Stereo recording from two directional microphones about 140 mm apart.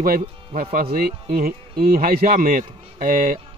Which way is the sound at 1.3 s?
90° right.